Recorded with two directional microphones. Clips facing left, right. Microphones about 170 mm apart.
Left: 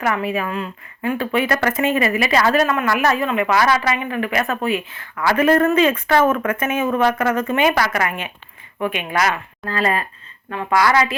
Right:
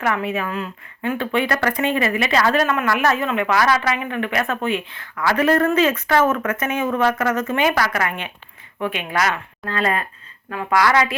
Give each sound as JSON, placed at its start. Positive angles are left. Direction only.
{"t": 0.0, "sound": "a woman's voice", "side_deg": 5}
{"t": 5.9, "sound": "speech", "side_deg": 30}
{"t": 6.6, "sound": "a woman's voice", "side_deg": 10}
{"t": 9.7, "sound": "a woman's voice", "side_deg": 0}